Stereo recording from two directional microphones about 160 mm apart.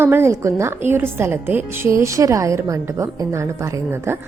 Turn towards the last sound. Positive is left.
turn(degrees=-15)  # may be behind; listen again after turning